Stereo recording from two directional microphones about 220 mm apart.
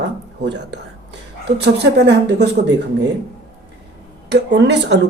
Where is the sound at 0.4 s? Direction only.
50° right (ahead or behind).